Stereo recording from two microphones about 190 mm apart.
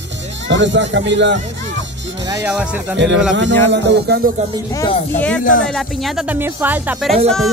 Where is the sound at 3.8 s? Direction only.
60° right (ahead or behind).